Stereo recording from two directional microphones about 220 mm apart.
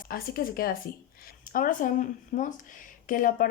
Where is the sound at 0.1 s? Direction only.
40° left (ahead or behind).